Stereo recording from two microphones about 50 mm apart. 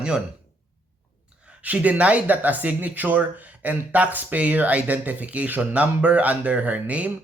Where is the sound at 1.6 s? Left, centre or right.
Right.